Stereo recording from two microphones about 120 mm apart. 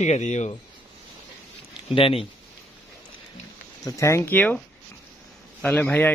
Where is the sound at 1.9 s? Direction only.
50° left (ahead or behind).